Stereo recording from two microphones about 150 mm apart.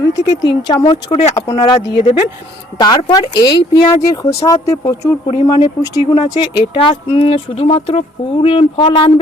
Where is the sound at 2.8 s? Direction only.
25° left (ahead or behind).